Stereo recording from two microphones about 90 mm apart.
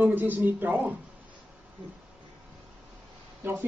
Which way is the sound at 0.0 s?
20° right (ahead or behind).